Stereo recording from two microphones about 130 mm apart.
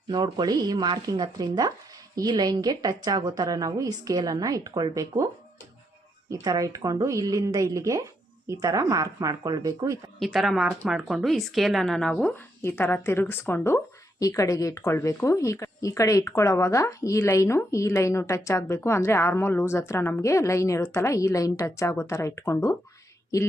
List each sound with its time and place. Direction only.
0.1 s a woman's voice: 35° right (ahead or behind)
10.2 s a woman's voice: centre (ahead or behind)
12.3 s speech: 15° left (ahead or behind)